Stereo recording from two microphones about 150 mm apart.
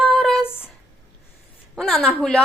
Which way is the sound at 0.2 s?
Centre (ahead or behind).